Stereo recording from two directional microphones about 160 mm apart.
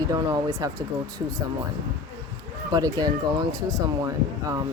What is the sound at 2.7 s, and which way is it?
Speech, 25° right (ahead or behind).